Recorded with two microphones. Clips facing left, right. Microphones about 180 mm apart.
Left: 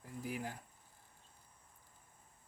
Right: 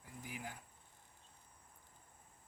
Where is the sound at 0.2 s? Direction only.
40° left (ahead or behind).